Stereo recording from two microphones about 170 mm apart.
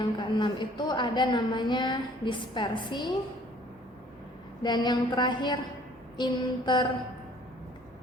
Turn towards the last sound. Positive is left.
turn(degrees=25)  # may be behind; listen again after turning